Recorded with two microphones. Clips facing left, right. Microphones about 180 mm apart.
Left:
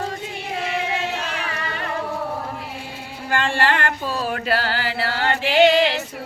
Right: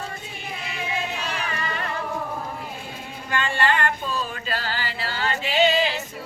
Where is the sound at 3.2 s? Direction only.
75° left (ahead or behind).